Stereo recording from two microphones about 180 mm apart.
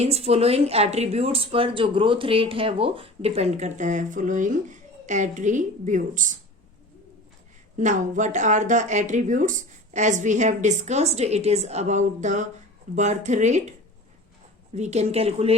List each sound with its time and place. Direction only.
0.0 s speech: 35° right (ahead or behind)
7.8 s speech: 45° right (ahead or behind)
14.8 s speech: 40° right (ahead or behind)